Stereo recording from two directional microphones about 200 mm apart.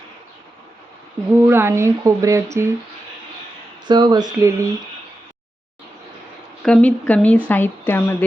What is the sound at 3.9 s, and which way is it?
Speech, 20° right (ahead or behind).